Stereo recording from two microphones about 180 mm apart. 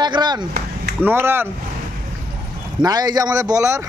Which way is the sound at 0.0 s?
25° right (ahead or behind).